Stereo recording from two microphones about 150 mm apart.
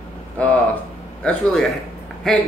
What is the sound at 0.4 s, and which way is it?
A man's voice, 10° left (ahead or behind).